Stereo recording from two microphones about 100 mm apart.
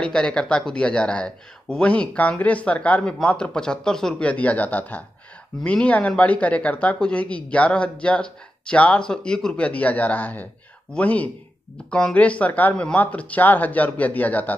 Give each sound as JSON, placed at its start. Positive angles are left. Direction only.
{"t": 0.0, "sound": "speech", "side_deg": 10}